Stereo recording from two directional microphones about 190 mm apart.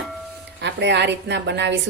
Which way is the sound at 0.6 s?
65° right (ahead or behind).